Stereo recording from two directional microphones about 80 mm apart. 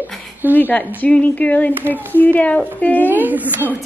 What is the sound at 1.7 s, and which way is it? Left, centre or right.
Speech, right.